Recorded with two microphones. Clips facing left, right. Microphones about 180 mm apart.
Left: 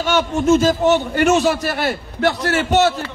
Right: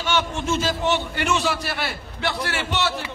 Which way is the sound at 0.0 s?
45° left (ahead or behind).